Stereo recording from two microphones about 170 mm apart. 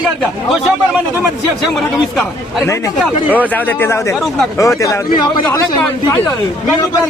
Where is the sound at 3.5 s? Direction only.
10° left (ahead or behind).